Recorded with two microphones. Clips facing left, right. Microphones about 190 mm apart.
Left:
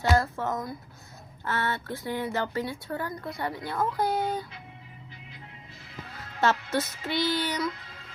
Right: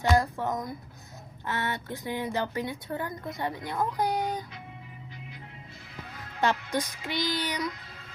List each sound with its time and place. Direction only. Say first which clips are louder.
0.2 s a woman's voice: even; 15° right (ahead or behind)
6.4 s a woman's voice: left 2 dB; 15° right (ahead or behind)